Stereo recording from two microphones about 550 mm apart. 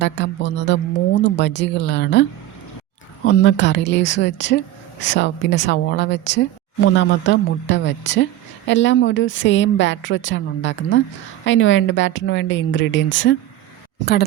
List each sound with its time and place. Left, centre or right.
0.0 s speech: centre
3.2 s speech: centre